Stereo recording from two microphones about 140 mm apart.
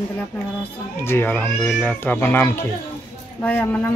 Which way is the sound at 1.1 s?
15° left (ahead or behind).